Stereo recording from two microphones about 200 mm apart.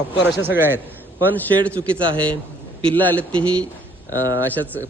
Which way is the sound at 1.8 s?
25° right (ahead or behind).